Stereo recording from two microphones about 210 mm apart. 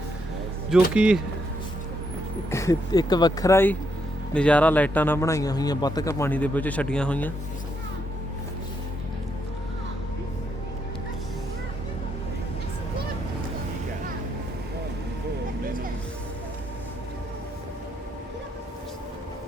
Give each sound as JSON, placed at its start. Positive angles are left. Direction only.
{"t": 0.7, "sound": "speech", "side_deg": -5}
{"t": 2.5, "sound": "a man's voice", "side_deg": 15}